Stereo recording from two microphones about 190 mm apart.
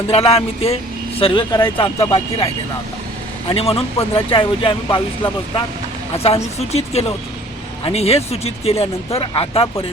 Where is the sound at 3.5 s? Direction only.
30° left (ahead or behind).